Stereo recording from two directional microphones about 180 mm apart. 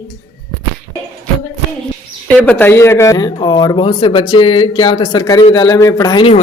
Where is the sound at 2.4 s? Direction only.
10° left (ahead or behind).